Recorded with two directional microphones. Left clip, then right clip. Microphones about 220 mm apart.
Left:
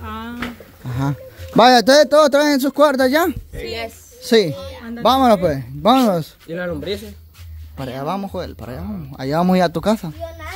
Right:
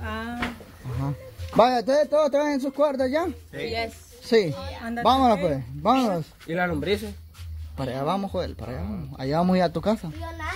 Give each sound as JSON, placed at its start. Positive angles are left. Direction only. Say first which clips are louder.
{"t": 1.6, "sound": "a man's voice", "louder": "left 9 dB", "side_deg": 45}
{"t": 3.7, "sound": "a woman's voice", "louder": "left 2 dB", "side_deg": 30}
{"t": 5.9, "sound": "speech", "louder": "left 8 dB", "side_deg": 55}
{"t": 6.5, "sound": "speech", "louder": "left 1 dB", "side_deg": -35}
{"t": 7.7, "sound": "speech", "louder": "left 2 dB", "side_deg": 10}